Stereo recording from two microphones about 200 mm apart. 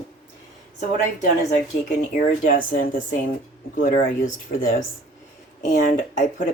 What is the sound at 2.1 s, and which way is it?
Speech, 40° left (ahead or behind).